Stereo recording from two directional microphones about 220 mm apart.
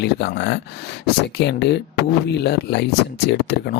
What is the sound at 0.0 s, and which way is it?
Speech, 50° left (ahead or behind).